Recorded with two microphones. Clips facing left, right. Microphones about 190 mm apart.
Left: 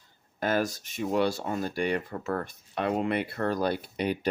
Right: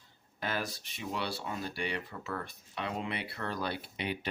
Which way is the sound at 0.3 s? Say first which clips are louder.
Left 9 dB; 45° left (ahead or behind).